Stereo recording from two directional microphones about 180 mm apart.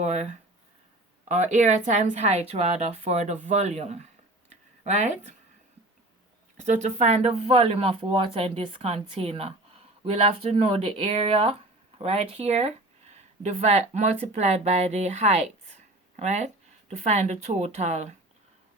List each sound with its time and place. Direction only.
0.0 s a woman's voice: 40° right (ahead or behind)
6.7 s a woman's voice: 40° right (ahead or behind)